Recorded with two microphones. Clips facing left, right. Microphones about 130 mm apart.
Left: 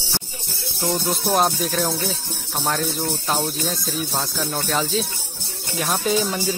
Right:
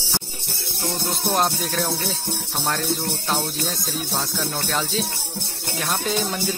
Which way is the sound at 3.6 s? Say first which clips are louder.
Left 2 dB; centre (ahead or behind).